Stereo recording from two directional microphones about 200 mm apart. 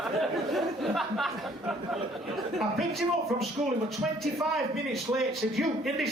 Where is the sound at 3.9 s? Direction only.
Centre (ahead or behind).